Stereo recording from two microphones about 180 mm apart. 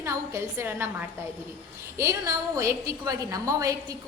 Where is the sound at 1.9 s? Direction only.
15° right (ahead or behind).